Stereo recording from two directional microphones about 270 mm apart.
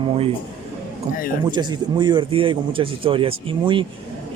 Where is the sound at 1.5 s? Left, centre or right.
Centre.